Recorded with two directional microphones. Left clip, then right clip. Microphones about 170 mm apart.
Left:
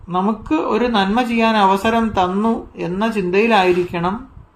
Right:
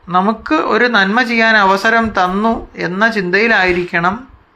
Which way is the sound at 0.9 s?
Centre (ahead or behind).